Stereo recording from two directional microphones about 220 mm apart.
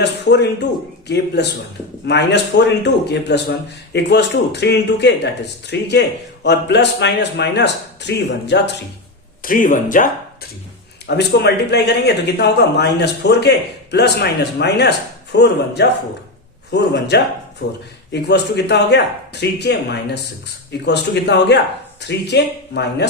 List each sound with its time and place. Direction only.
0.0 s a man's voice: 50° left (ahead or behind)
9.4 s speech: 40° left (ahead or behind)
11.0 s speech: 50° left (ahead or behind)